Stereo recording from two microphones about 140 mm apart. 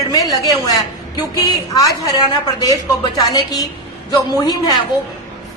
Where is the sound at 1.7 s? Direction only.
25° left (ahead or behind).